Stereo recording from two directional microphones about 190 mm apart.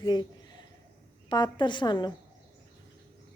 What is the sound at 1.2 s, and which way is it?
Speech, 25° left (ahead or behind).